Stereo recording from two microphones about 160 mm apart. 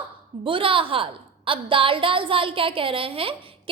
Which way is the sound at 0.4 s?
35° right (ahead or behind).